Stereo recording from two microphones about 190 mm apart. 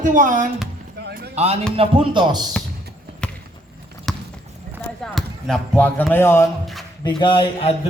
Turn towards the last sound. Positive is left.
turn(degrees=30)  # may be behind; listen again after turning